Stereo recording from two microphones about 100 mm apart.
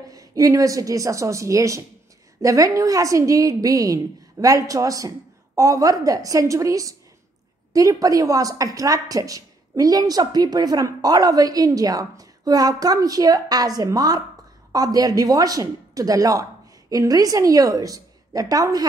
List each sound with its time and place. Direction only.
0.1 s a woman's voice: 35° right (ahead or behind)